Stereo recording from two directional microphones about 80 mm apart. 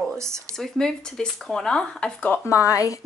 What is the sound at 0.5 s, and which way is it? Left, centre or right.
Speech, centre.